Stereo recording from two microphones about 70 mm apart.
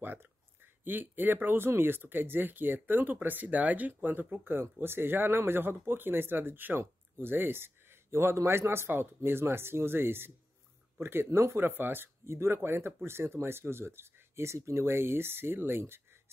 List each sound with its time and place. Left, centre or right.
0.0 s speech: right